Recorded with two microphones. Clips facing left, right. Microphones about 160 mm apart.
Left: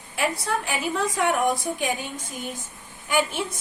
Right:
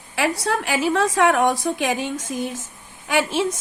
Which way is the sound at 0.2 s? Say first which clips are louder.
Right 4 dB; 90° right.